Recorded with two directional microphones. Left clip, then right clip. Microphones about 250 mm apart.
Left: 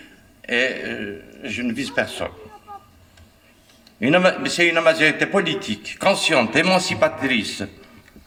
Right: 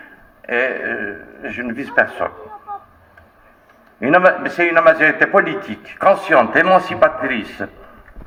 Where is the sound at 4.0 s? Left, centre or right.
Left.